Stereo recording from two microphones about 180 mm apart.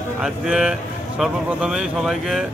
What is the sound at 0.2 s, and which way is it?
Speech, 5° right (ahead or behind).